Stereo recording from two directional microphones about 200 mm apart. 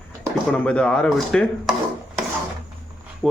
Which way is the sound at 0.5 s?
5° left (ahead or behind).